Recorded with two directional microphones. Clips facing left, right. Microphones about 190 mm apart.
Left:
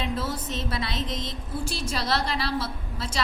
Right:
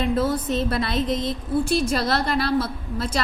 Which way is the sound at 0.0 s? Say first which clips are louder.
Right 8 dB; 55° right (ahead or behind).